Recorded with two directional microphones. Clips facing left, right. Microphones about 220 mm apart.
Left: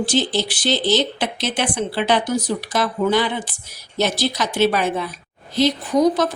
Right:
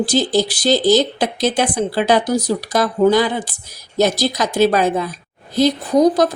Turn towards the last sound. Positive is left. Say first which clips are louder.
# right 4 dB
turn(degrees=-35)  # may be behind; listen again after turning